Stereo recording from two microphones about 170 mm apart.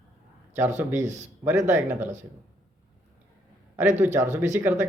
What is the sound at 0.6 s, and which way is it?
Speech, 10° right (ahead or behind).